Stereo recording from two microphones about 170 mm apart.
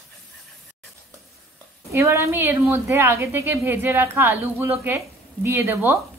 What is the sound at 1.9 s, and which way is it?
A woman's voice, 15° right (ahead or behind).